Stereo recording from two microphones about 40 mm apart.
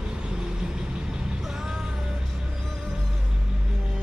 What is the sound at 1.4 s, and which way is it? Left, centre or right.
Music, centre.